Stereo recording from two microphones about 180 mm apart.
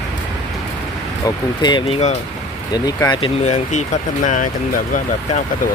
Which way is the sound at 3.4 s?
40° left (ahead or behind).